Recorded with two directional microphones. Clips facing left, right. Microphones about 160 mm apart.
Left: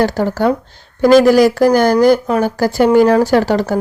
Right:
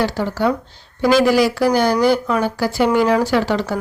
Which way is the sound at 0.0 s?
45° left (ahead or behind).